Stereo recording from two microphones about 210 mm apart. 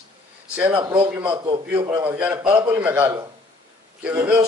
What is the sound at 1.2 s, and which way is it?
Speech, 20° right (ahead or behind).